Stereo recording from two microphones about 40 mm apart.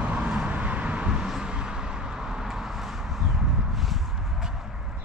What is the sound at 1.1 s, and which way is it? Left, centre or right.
Vehicle, centre.